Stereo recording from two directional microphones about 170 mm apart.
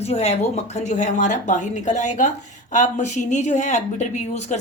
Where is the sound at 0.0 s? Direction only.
40° left (ahead or behind).